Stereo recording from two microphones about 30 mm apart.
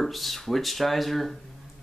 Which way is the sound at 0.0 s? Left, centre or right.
Centre.